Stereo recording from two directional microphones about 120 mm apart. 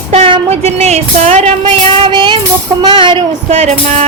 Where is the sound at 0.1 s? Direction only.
55° right (ahead or behind).